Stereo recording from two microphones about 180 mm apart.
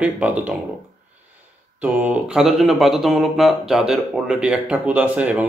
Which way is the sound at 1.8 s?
5° right (ahead or behind).